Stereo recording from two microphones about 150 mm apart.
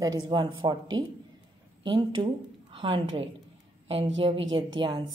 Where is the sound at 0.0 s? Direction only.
30° right (ahead or behind).